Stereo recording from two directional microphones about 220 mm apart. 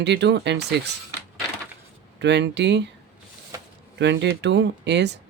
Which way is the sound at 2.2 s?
50° right (ahead or behind).